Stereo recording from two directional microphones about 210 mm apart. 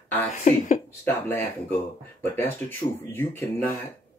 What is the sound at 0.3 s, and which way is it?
Speech, 35° left (ahead or behind).